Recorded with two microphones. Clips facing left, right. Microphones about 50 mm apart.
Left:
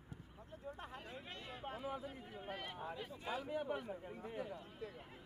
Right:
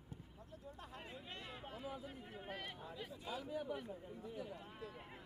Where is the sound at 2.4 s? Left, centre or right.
Centre.